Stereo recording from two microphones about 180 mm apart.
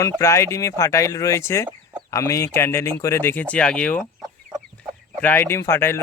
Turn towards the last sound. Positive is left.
turn(degrees=15)  # may be behind; listen again after turning